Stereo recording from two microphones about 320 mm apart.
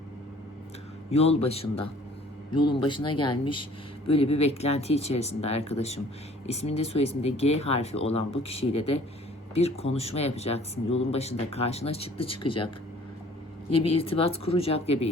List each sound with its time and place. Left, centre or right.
1.1 s speech: centre
13.9 s speech: centre